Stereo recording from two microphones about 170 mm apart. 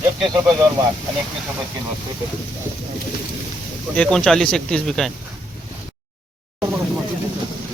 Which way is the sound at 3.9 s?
5° left (ahead or behind).